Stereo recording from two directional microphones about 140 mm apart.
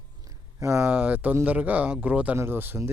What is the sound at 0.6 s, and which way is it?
Speech, 20° right (ahead or behind).